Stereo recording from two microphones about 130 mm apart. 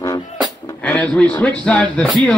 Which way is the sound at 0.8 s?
10° left (ahead or behind).